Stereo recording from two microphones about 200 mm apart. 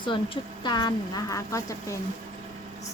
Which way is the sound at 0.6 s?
20° left (ahead or behind).